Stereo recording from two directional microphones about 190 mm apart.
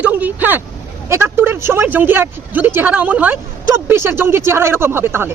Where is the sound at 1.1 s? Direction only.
10° right (ahead or behind).